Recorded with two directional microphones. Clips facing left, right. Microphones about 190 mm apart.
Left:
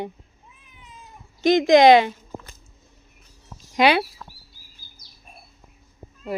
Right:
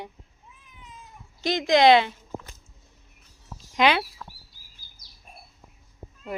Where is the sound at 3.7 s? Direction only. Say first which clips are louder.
Left 3 dB; 10° left (ahead or behind).